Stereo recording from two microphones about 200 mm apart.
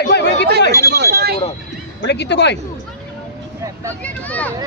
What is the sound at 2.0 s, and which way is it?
Speech, 60° left (ahead or behind).